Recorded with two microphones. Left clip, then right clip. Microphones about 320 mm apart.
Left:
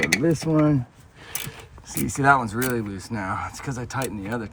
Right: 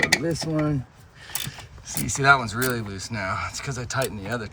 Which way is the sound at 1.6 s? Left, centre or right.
Centre.